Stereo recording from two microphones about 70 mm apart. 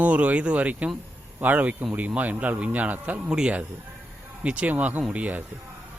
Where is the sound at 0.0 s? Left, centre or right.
Centre.